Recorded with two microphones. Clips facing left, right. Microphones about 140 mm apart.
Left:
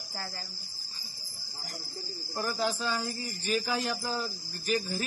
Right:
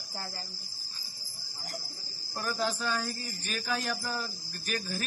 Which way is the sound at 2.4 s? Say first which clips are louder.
Left 1 dB; 15° left (ahead or behind).